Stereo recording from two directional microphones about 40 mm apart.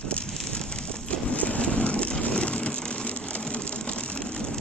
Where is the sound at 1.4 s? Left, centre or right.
Left.